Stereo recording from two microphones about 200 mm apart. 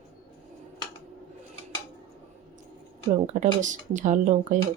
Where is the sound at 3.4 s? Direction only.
40° right (ahead or behind).